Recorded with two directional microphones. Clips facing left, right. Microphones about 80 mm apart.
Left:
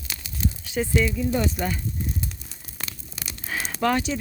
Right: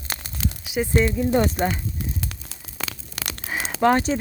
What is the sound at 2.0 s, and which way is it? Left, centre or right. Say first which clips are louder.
Tearing: even; right.